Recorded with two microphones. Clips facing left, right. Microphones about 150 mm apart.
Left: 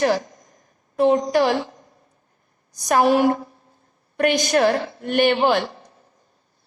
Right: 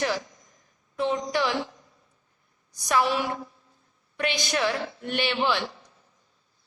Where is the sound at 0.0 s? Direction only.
50° left (ahead or behind).